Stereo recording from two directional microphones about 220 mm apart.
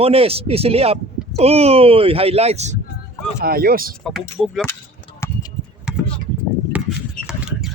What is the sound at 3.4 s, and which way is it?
Speech, 45° right (ahead or behind).